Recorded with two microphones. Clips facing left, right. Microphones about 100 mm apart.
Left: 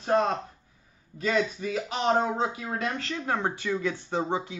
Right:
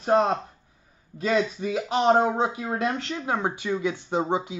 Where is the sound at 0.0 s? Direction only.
20° right (ahead or behind).